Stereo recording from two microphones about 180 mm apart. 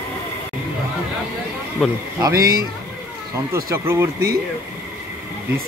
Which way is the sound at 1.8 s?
Centre (ahead or behind).